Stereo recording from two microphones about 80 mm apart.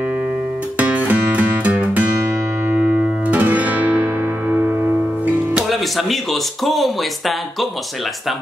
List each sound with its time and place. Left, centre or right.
0.7 s music: centre
2.7 s guitar: centre
5.2 s music: centre
5.7 s speech: centre